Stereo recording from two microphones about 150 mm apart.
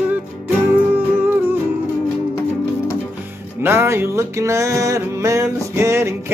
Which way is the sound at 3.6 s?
15° right (ahead or behind).